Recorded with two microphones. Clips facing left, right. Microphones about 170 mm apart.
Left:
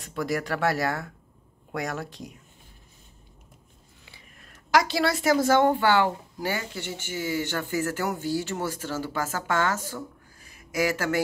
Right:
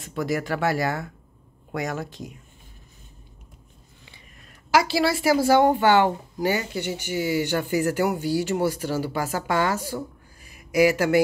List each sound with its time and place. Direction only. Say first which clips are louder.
0.0 s speech: right 2 dB; centre (ahead or behind)
4.5 s a woman's voice: right 2 dB; 5° right (ahead or behind)